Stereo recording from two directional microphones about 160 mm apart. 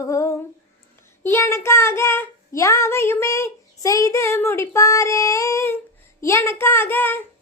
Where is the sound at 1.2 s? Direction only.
15° left (ahead or behind).